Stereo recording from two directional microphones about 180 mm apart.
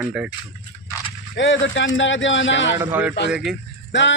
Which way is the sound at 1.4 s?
85° left.